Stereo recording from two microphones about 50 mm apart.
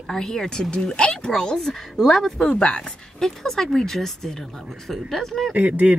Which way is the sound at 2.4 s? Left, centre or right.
Centre.